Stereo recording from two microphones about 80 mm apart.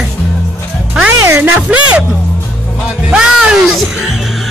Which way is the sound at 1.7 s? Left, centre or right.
Centre.